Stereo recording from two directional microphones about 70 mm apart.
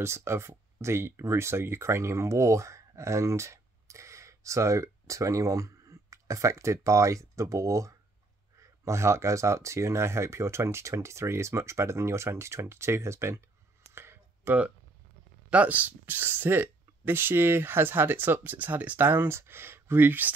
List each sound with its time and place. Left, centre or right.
0.0 s speech: right
13.8 s clicking: right
15.5 s speech: right